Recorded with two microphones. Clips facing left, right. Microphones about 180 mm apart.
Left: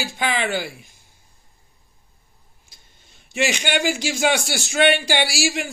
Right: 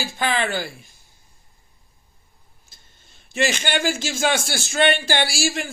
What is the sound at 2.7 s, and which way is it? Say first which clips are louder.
A man's voice: left 1 dB; 15° left (ahead or behind).